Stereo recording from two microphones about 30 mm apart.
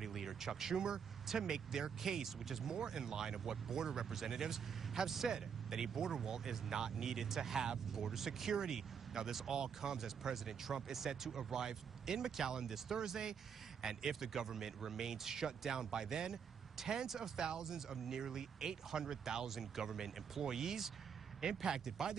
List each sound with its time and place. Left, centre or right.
0.0 s speech: centre
2.7 s speech: right
10.3 s speech: centre